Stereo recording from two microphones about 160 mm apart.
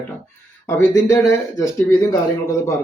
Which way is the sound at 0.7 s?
15° left (ahead or behind).